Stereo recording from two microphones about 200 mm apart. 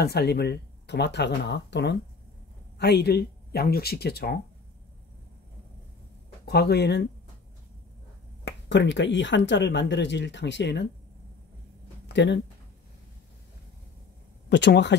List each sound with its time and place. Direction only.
0.0 s speech: 55° left (ahead or behind)
6.4 s speech: 55° left (ahead or behind)
8.5 s speech: 60° left (ahead or behind)
12.1 s speech: 60° left (ahead or behind)
14.5 s speech: 60° left (ahead or behind)